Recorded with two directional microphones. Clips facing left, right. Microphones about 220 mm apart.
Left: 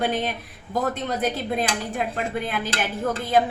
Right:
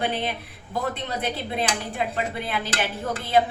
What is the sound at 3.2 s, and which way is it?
Speech, 50° left (ahead or behind).